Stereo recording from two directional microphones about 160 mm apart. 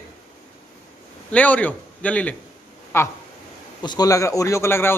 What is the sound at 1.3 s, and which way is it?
Speech, 10° left (ahead or behind).